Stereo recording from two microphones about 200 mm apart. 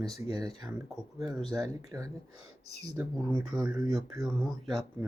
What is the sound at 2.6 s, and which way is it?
Speech, 55° left (ahead or behind).